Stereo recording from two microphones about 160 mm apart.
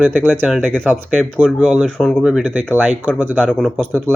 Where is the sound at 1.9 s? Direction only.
5° left (ahead or behind).